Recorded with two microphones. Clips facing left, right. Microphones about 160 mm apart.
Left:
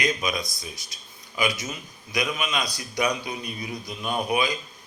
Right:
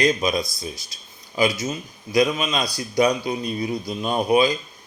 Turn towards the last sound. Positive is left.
turn(degrees=-30)  # may be behind; listen again after turning